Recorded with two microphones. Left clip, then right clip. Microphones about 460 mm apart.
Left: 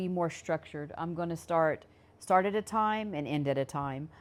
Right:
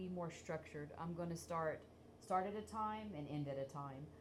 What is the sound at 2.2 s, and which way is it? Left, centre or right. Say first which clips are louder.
Speech: left 14 dB; left.